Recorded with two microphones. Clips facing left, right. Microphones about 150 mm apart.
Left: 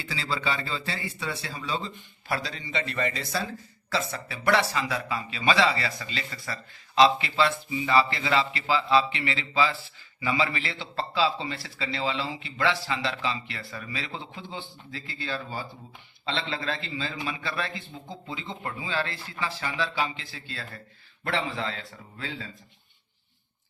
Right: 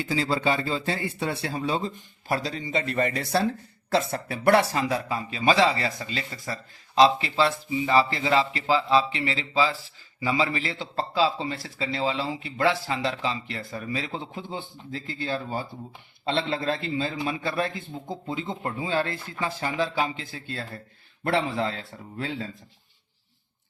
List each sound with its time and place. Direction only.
0.0 s a man's voice: 45° right (ahead or behind)
21.2 s a man's voice: 55° right (ahead or behind)